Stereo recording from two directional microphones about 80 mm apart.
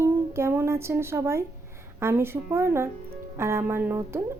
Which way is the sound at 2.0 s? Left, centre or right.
Right.